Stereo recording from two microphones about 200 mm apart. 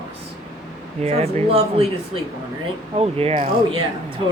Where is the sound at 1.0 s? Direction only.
30° right (ahead or behind).